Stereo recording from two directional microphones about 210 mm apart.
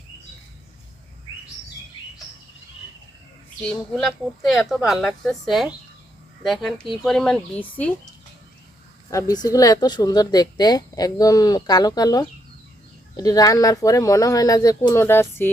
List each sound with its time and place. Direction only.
3.9 s a woman's voice: centre (ahead or behind)
9.0 s speech: 15° left (ahead or behind)